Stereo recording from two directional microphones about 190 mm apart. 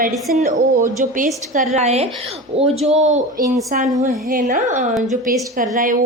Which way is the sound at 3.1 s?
45° right (ahead or behind).